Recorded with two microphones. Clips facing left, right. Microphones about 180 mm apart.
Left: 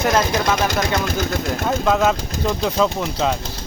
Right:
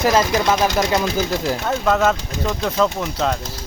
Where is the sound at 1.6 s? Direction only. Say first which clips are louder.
Left 1 dB; centre (ahead or behind).